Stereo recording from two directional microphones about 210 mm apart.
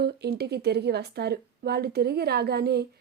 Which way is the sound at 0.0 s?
50° right (ahead or behind).